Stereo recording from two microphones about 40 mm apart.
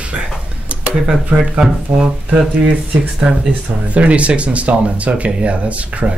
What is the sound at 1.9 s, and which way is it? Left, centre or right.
Speech, right.